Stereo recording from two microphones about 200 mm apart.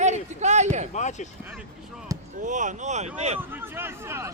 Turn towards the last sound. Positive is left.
turn(degrees=-10)  # may be behind; listen again after turning